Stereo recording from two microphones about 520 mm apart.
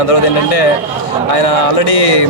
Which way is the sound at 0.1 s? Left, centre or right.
Left.